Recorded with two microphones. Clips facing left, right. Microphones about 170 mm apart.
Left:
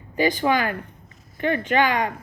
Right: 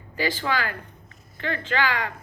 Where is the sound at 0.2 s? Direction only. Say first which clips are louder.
Left 6 dB; 20° left (ahead or behind).